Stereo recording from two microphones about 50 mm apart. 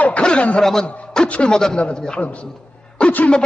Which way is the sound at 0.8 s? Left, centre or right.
Centre.